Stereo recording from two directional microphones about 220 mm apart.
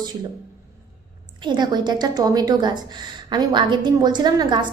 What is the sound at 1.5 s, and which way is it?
A woman's voice, 20° right (ahead or behind).